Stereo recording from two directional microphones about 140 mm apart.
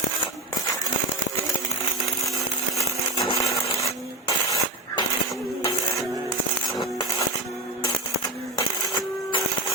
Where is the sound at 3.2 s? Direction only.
20° left (ahead or behind).